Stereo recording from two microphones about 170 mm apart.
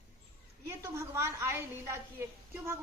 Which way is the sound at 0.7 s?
15° right (ahead or behind).